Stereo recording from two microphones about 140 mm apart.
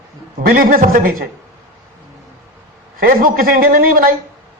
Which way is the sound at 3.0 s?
90° right.